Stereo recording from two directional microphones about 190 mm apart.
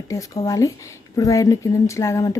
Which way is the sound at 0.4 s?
15° left (ahead or behind).